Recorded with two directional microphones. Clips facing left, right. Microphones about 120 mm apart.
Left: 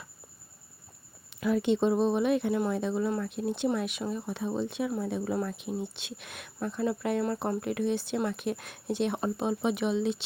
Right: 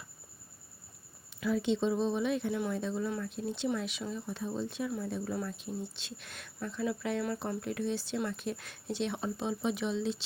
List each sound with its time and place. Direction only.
1.4 s speech: 60° left (ahead or behind)